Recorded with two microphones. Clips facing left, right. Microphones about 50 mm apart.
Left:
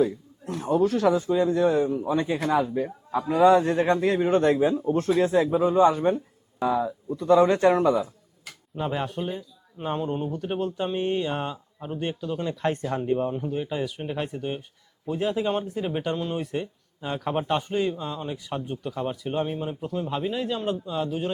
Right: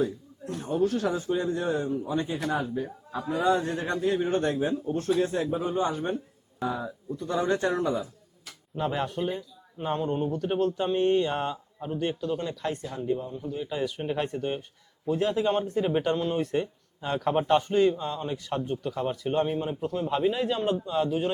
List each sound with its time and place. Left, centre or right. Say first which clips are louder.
0.5 s a man's voice: left 4 dB; left
3.6 s speech: left 8 dB; left
4.0 s speech: left 5 dB; left
6.6 s a man's voice: left 7 dB; left
8.7 s speech: even; centre
12.6 s speech: left 5 dB; left
13.7 s speech: even; centre